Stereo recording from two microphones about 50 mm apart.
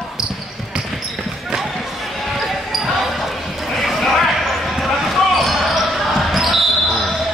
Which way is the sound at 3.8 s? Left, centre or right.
Centre.